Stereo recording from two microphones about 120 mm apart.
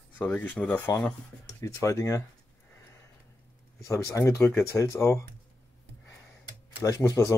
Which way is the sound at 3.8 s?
25° left (ahead or behind).